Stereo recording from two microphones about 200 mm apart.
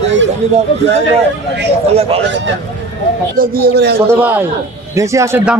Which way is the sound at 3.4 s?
45° right (ahead or behind).